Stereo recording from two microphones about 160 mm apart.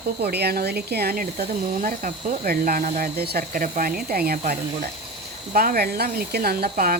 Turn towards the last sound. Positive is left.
turn(degrees=-70)  # may be behind; listen again after turning